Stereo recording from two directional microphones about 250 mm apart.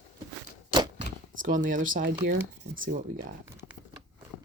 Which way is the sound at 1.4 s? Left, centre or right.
Right.